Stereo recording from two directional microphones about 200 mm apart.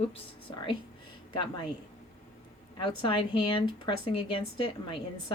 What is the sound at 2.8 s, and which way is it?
Speech, 25° left (ahead or behind).